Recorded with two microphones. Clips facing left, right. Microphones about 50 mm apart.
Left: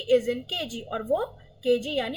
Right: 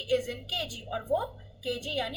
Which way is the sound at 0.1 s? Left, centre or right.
Left.